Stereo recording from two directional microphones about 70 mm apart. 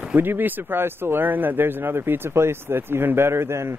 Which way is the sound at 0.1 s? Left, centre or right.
Right.